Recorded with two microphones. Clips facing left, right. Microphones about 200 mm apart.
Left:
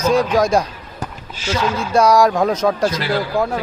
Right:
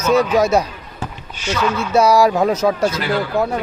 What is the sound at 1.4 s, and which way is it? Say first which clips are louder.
Speech: even; 30° left (ahead or behind).